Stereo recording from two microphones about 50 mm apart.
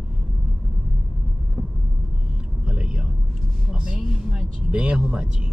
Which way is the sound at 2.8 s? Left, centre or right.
Centre.